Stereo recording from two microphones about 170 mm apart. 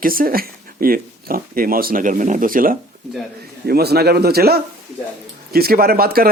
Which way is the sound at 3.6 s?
70° right (ahead or behind).